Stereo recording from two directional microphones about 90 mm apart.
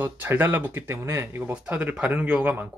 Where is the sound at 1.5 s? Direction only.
15° right (ahead or behind).